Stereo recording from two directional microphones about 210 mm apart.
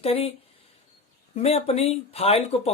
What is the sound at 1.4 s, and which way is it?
Speech, 30° left (ahead or behind).